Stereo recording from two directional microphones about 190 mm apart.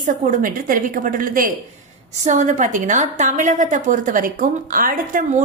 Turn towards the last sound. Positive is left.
turn(degrees=-45)  # may be behind; listen again after turning